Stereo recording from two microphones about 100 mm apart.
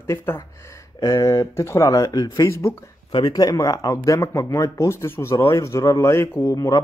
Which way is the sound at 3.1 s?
45° left (ahead or behind).